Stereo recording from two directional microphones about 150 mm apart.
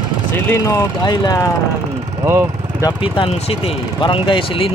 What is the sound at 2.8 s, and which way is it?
Speech, 30° left (ahead or behind).